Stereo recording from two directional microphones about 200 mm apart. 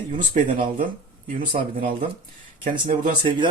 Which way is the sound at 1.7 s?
45° right (ahead or behind).